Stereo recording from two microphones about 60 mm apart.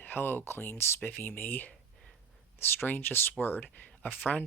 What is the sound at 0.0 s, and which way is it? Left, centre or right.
Speech, left.